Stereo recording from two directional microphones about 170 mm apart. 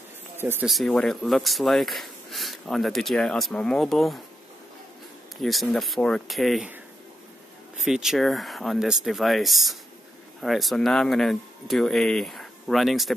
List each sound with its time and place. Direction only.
0.4 s speech: 15° right (ahead or behind)
0.7 s speech: centre (ahead or behind)
5.4 s speech: centre (ahead or behind)
7.8 s speech: 5° right (ahead or behind)